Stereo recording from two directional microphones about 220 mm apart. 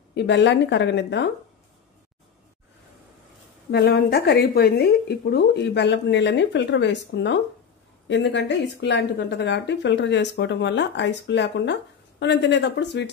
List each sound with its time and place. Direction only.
0.1 s speech: 50° left (ahead or behind)
3.7 s speech: 45° left (ahead or behind)